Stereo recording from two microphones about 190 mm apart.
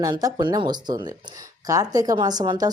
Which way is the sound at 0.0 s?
20° right (ahead or behind).